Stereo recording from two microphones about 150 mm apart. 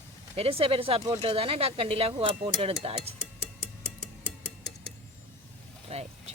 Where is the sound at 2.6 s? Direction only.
40° right (ahead or behind).